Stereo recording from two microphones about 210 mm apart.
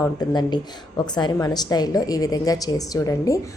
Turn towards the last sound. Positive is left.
turn(degrees=15)  # may be behind; listen again after turning